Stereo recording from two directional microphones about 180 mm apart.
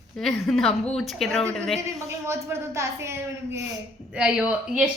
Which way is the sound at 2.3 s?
15° right (ahead or behind).